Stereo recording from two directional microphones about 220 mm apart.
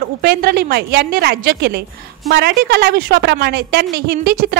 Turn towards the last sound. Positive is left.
turn(degrees=-45)  # may be behind; listen again after turning